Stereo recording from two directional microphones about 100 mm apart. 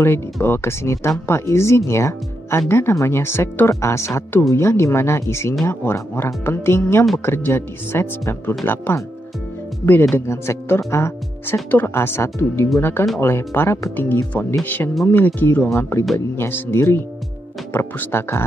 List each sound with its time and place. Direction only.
0.0 s speech: 25° left (ahead or behind)
10.1 s speech: 25° left (ahead or behind)